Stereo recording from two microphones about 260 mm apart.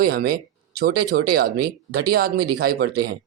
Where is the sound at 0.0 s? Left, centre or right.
Right.